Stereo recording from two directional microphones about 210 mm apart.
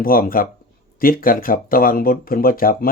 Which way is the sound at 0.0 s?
45° left (ahead or behind).